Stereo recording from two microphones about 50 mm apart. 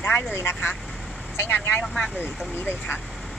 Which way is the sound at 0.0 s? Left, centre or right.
Left.